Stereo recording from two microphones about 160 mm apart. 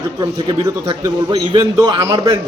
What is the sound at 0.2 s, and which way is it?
A man's voice, 25° right (ahead or behind).